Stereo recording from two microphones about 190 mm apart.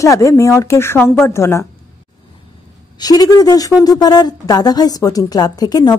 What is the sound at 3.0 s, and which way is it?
A woman's voice, 20° left (ahead or behind).